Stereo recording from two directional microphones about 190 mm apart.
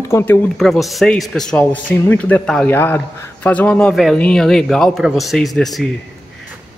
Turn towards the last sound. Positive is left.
turn(degrees=0)  # may be behind; listen again after turning